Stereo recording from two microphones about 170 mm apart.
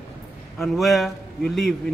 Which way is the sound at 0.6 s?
Centre (ahead or behind).